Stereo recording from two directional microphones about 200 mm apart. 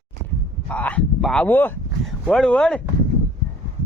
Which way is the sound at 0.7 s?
5° left (ahead or behind).